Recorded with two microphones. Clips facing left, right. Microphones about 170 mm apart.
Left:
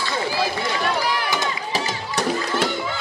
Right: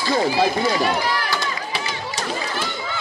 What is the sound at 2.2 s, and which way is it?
Music, 60° left (ahead or behind).